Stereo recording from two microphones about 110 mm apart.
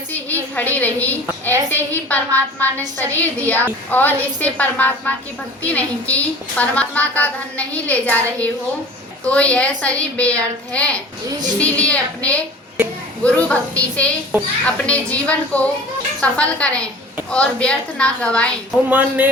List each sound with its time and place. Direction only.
0.5 s a woman's voice: 15° left (ahead or behind)
11.3 s a woman's voice: 40° right (ahead or behind)
11.6 s a woman's voice: 10° left (ahead or behind)
18.9 s speech: 15° right (ahead or behind)